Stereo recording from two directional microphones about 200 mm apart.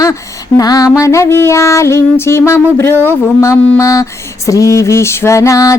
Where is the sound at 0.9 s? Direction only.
15° left (ahead or behind).